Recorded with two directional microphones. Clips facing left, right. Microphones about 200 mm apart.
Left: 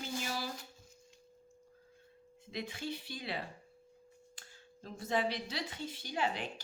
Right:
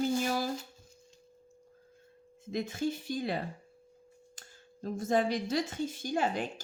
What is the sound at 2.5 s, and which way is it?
Speech, 45° right (ahead or behind).